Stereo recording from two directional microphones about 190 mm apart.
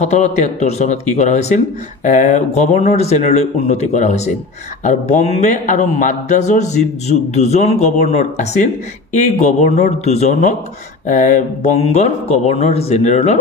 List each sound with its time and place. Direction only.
0.0 s speech: 35° left (ahead or behind)